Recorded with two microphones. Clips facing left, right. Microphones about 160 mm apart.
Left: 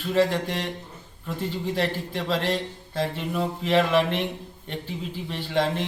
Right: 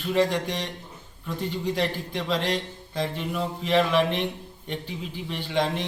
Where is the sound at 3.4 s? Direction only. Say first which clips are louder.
Left 1 dB; 10° left (ahead or behind).